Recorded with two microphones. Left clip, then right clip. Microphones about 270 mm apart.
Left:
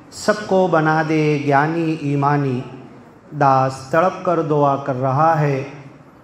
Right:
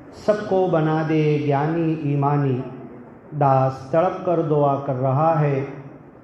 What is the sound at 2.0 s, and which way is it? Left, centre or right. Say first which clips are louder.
Mantra: left 7 dB; left.